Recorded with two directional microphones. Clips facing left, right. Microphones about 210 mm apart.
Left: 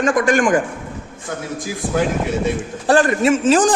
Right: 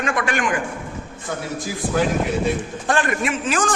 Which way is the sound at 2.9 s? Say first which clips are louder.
Left 7 dB; 35° left (ahead or behind).